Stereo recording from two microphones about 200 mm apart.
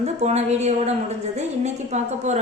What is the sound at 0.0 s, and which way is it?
A woman's voice, 35° right (ahead or behind).